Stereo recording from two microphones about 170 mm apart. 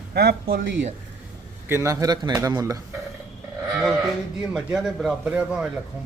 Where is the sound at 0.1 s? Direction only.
70° right (ahead or behind); by 0.9 s 90° right.